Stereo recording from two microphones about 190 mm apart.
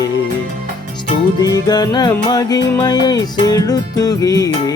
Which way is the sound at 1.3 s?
20° left (ahead or behind).